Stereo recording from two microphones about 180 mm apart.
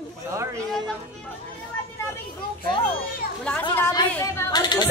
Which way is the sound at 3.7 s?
10° left (ahead or behind).